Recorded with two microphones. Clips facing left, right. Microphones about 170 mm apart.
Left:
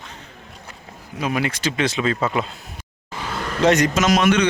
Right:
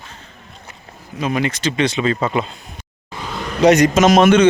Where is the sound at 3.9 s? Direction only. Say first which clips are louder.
Right 6 dB; 25° right (ahead or behind).